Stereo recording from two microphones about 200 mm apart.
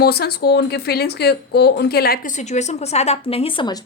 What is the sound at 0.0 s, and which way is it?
Speech, 50° left (ahead or behind).